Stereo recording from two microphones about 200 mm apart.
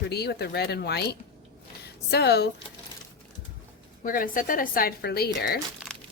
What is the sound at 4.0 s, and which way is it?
Speech, 45° left (ahead or behind).